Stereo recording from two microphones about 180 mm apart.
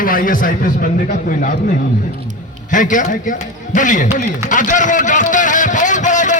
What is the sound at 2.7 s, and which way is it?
Speech, 45° left (ahead or behind).